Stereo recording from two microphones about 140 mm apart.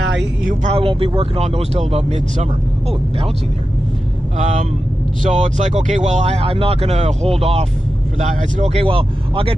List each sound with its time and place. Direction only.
0.7 s speech: 40° right (ahead or behind)
4.4 s speech: 55° right (ahead or behind)
8.2 s speech: 60° right (ahead or behind); by 9.6 s 40° right (ahead or behind)